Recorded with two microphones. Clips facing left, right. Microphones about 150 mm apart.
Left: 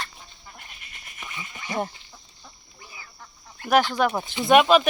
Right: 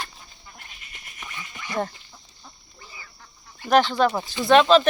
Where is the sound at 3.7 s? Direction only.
10° left (ahead or behind).